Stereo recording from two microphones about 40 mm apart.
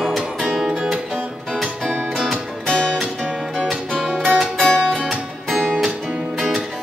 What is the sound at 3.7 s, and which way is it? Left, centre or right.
Music, centre.